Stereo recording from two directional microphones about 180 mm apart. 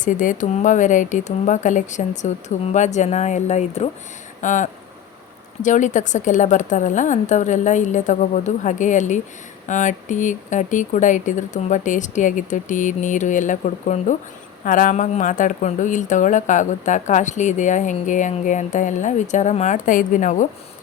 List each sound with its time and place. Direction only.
0.0 s speech: 45° left (ahead or behind)